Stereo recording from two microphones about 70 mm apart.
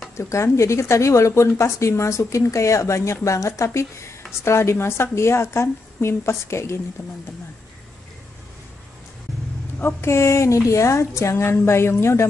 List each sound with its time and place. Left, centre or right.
0.2 s speech: left
9.8 s speech: left